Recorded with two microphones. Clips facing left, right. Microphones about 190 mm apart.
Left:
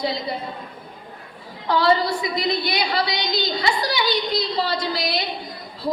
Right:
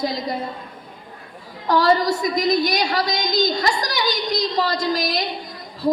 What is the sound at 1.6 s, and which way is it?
A woman's voice, 45° right (ahead or behind).